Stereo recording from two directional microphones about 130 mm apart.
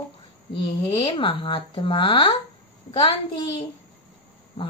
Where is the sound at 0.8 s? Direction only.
40° left (ahead or behind).